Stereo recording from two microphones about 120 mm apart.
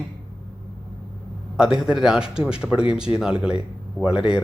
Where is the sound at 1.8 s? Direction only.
5° right (ahead or behind).